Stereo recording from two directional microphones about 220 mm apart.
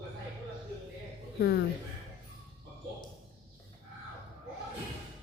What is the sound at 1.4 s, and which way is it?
Speech, 45° left (ahead or behind).